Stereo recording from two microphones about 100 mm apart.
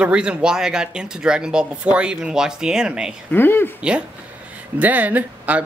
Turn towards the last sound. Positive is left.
turn(degrees=-15)  # may be behind; listen again after turning